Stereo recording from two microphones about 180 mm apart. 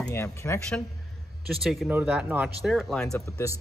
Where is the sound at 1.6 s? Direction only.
Centre (ahead or behind).